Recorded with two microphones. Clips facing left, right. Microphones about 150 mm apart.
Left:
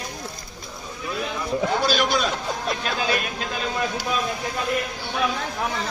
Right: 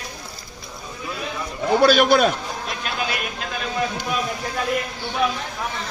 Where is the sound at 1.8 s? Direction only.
60° right (ahead or behind).